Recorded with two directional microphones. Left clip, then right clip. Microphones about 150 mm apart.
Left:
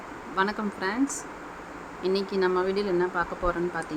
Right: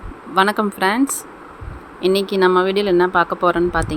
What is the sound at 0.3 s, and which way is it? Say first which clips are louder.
Speech: right 12 dB; 45° right (ahead or behind).